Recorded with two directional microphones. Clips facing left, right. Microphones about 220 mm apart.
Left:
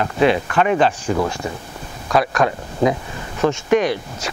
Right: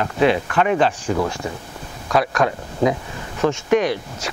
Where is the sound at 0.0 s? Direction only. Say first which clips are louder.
Left 1 dB; 20° left (ahead or behind).